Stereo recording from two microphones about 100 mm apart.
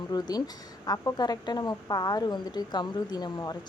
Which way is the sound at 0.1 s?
40° left (ahead or behind).